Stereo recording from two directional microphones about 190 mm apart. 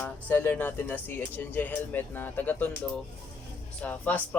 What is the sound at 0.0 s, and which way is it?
Speech, 10° left (ahead or behind).